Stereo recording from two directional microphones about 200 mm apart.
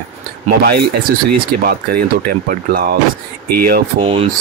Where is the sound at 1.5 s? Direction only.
50° right (ahead or behind).